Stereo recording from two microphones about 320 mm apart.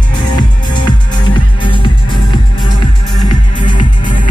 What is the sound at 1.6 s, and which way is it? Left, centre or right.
Music, centre.